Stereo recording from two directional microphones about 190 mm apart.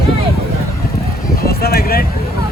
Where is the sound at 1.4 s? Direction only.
55° left (ahead or behind).